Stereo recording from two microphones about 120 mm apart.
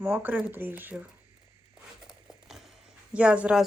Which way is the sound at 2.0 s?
5° right (ahead or behind).